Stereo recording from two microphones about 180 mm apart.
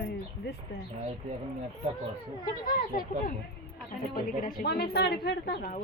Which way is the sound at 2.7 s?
50° left (ahead or behind).